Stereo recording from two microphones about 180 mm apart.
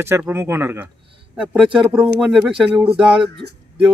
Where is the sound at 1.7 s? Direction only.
25° right (ahead or behind).